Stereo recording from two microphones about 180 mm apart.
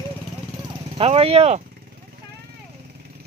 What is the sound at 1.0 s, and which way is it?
Speech, 35° right (ahead or behind).